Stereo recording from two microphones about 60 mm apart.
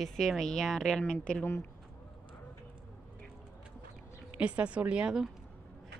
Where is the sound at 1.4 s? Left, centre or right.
Left.